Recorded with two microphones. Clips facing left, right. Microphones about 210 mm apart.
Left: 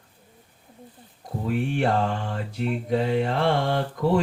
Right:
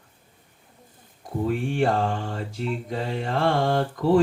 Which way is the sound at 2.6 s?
55° left (ahead or behind).